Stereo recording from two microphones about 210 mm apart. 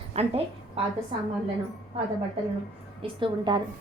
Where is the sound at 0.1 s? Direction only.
30° right (ahead or behind).